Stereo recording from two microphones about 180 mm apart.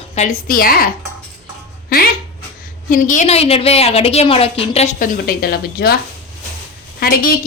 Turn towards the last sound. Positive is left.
turn(degrees=55)  # may be behind; listen again after turning